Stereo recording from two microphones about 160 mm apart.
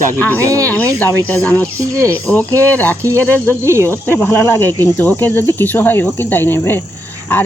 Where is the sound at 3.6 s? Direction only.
15° right (ahead or behind).